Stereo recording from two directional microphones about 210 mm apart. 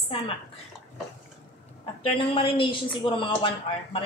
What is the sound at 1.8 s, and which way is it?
A woman's voice, 25° left (ahead or behind).